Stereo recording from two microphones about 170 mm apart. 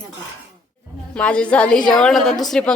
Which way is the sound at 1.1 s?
5° left (ahead or behind).